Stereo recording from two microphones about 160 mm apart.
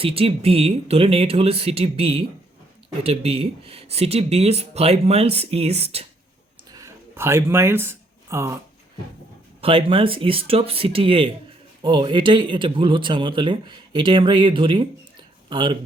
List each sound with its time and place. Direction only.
0.0 s speech: 35° right (ahead or behind)
6.7 s a sound: 20° right (ahead or behind)
9.6 s speech: 35° right (ahead or behind)